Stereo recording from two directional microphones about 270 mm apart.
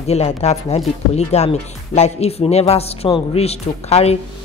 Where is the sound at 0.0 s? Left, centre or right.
Left.